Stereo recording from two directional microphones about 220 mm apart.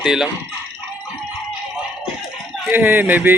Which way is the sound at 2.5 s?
10° right (ahead or behind).